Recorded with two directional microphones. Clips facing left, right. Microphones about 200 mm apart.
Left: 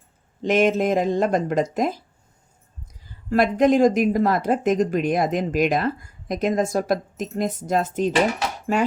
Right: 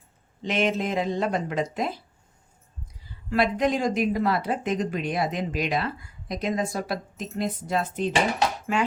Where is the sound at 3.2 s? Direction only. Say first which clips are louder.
Left 6 dB; 45° left (ahead or behind).